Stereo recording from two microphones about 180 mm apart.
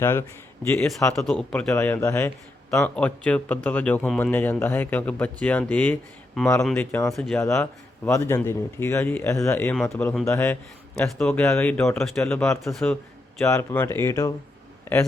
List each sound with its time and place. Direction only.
0.0 s speech: 15° left (ahead or behind)
0.9 s speech: centre (ahead or behind)
1.7 s speech: 15° left (ahead or behind)
2.6 s speech: 5° left (ahead or behind)
7.3 s speech: 15° left (ahead or behind)
10.2 s speech: 15° left (ahead or behind)
13.5 s speech: 15° left (ahead or behind)